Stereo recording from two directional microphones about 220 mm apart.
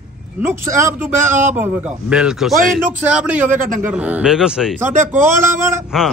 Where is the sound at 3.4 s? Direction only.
35° right (ahead or behind).